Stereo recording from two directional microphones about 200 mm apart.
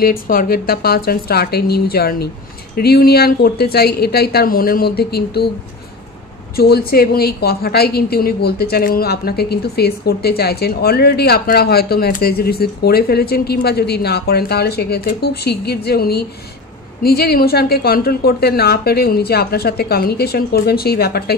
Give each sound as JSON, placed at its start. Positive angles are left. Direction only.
{"t": 0.0, "sound": "a woman's voice", "side_deg": 50}
{"t": 6.5, "sound": "a woman's voice", "side_deg": 50}